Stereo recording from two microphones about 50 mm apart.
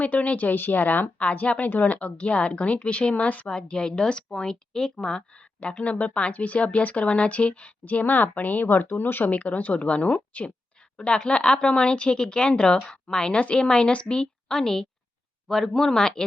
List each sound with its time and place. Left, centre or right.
0.0 s speech: left
1.5 s speech: left
9.3 s speech: left; by 16.2 s centre